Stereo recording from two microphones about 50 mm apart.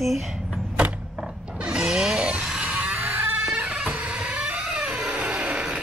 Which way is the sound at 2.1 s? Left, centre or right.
Right.